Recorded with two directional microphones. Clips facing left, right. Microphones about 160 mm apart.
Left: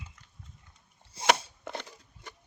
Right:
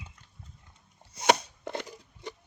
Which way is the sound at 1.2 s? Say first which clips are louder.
Right 2 dB; 25° left (ahead or behind).